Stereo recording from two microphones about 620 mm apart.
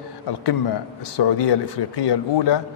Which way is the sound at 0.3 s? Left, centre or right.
Left.